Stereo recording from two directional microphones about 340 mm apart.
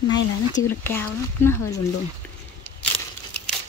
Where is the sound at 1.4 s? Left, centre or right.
Centre.